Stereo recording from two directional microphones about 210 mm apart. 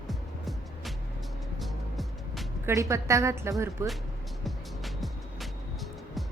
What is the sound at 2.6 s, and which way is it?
A woman's voice, 15° right (ahead or behind).